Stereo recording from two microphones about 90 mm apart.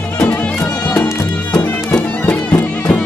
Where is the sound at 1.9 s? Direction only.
15° left (ahead or behind).